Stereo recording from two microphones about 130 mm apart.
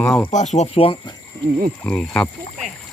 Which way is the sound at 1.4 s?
20° left (ahead or behind).